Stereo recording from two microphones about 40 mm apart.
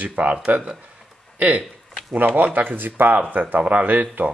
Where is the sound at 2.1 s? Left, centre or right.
Right.